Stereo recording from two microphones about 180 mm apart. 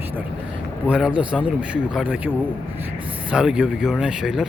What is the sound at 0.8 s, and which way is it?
A man's voice, 5° right (ahead or behind).